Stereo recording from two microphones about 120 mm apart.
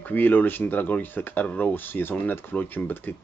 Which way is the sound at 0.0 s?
15° left (ahead or behind).